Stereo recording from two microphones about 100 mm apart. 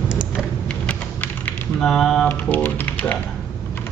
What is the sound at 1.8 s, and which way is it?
Speech, 5° left (ahead or behind).